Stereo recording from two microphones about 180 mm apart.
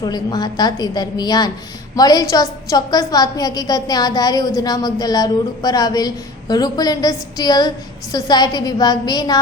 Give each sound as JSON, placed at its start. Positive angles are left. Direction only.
{"t": 0.0, "sound": "a woman's voice", "side_deg": 25}